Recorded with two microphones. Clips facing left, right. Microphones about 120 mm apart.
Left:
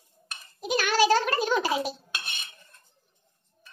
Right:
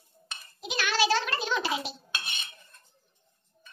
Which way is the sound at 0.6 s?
45° left (ahead or behind).